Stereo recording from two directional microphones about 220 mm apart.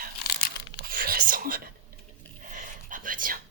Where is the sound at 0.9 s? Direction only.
40° right (ahead or behind).